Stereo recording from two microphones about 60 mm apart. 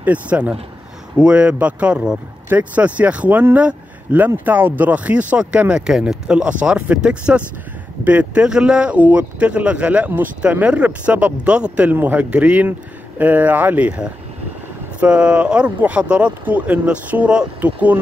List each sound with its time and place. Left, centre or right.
0.0 s speech: right
11.9 s speech: right